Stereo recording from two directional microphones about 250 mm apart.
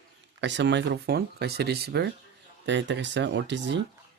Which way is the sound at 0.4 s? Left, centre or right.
Right.